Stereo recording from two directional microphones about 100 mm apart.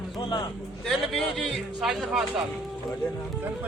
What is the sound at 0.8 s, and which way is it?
A man's voice, 5° left (ahead or behind).